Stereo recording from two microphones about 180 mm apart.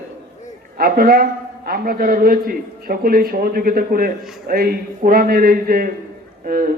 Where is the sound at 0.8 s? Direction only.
55° right (ahead or behind).